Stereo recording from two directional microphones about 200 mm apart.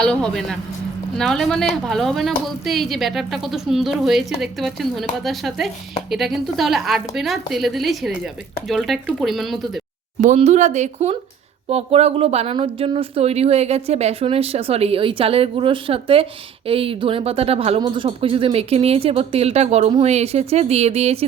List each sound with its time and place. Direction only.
0.0 s a woman's voice: 5° left (ahead or behind)
10.2 s speech: 35° right (ahead or behind)